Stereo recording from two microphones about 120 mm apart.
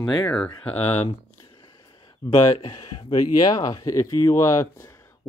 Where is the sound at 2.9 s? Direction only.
35° left (ahead or behind).